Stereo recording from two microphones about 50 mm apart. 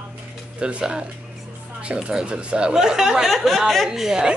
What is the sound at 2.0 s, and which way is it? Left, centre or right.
Speech, centre.